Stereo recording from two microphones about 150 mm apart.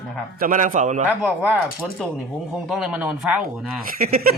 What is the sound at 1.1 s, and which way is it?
Speech, 10° right (ahead or behind).